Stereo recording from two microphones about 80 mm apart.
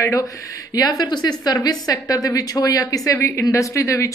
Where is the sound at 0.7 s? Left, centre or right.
Left.